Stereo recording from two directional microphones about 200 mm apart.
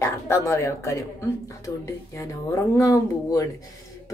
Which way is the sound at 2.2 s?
15° left (ahead or behind).